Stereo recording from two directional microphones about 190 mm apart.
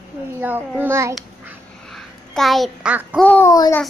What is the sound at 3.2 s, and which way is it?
Speech, 10° left (ahead or behind).